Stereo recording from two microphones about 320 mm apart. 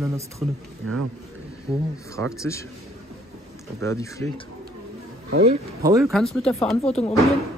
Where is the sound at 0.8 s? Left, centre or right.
Right.